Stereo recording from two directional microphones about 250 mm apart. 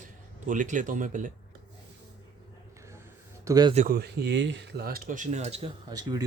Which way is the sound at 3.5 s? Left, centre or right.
Centre.